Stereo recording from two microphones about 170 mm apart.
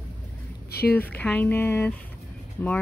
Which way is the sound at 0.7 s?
65° left (ahead or behind).